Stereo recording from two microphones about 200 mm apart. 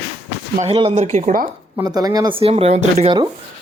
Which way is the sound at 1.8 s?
20° right (ahead or behind).